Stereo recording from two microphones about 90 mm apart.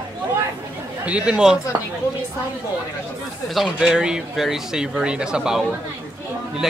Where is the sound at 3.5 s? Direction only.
5° right (ahead or behind).